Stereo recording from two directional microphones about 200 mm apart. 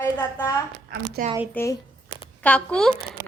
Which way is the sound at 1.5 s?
15° left (ahead or behind).